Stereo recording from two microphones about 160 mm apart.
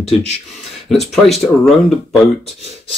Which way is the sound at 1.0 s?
Centre (ahead or behind).